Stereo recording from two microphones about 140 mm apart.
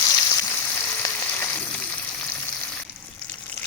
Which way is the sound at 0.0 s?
25° left (ahead or behind).